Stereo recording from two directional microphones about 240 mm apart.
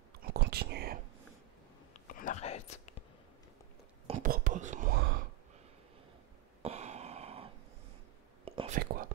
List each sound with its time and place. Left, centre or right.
0.2 s whispering: right
2.0 s whispering: left
4.1 s whispering: right
6.6 s a sound: right
8.5 s whispering: right